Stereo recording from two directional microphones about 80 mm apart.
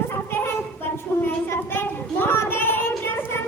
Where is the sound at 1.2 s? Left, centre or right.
Left.